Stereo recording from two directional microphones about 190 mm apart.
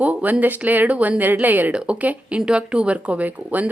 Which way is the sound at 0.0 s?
10° right (ahead or behind).